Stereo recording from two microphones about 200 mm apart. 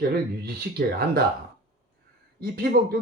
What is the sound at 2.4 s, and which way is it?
Speech, 50° right (ahead or behind).